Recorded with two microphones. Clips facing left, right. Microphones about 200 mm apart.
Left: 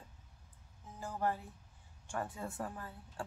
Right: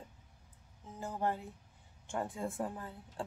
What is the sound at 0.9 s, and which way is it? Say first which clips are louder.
Speech: right 1 dB; 20° right (ahead or behind).